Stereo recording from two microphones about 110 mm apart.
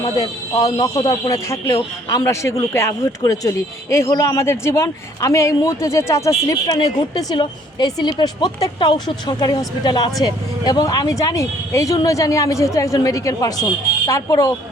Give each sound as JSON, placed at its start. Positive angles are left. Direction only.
{"t": 0.0, "sound": "a woman's voice", "side_deg": 35}